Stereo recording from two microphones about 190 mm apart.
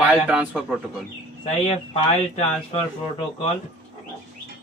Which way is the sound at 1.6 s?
30° left (ahead or behind).